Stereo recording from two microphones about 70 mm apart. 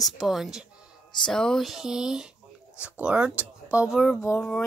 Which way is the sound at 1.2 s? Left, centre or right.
Centre.